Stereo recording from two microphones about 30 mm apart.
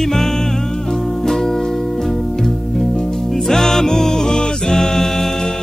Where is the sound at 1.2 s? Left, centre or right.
Centre.